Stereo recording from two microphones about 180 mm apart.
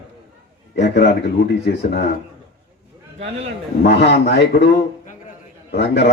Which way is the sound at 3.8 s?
70° left (ahead or behind).